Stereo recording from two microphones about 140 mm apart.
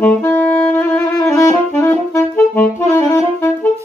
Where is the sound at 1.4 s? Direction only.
15° left (ahead or behind).